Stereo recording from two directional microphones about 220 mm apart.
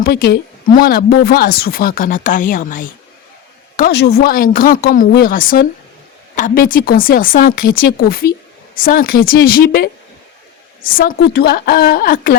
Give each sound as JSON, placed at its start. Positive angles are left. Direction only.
{"t": 0.0, "sound": "speech", "side_deg": 45}
{"t": 3.8, "sound": "a woman's voice", "side_deg": 45}